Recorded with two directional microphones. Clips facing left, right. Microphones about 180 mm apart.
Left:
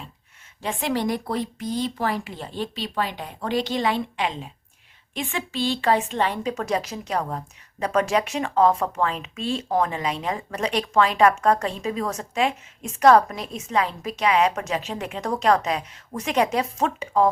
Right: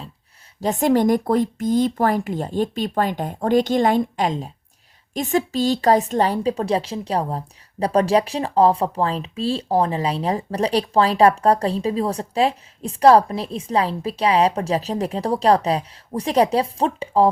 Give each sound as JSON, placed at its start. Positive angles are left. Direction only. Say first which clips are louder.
{"t": 0.6, "sound": "a woman's voice", "louder": "right 8 dB", "side_deg": -40}